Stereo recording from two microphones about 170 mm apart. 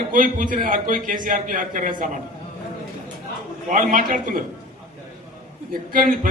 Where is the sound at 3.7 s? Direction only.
50° right (ahead or behind).